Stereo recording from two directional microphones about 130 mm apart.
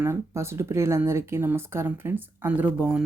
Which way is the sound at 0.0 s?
20° right (ahead or behind).